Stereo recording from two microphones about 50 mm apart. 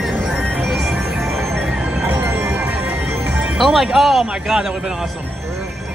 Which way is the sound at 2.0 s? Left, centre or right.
Right.